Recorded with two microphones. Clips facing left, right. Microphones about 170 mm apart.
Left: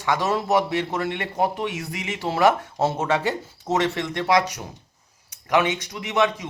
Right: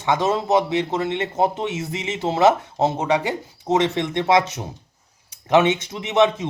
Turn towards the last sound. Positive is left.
turn(degrees=-20)  # may be behind; listen again after turning